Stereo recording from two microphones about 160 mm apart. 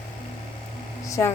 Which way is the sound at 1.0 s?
20° left (ahead or behind).